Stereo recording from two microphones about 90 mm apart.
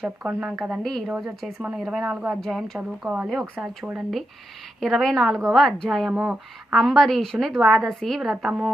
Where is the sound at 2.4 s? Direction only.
5° left (ahead or behind).